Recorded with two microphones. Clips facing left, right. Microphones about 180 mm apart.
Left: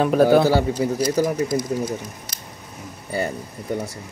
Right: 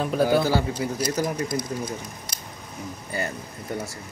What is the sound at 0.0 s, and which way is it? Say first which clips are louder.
Speech: left 6 dB; 60° left (ahead or behind).